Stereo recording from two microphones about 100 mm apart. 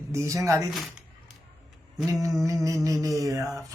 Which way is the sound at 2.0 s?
35° right (ahead or behind).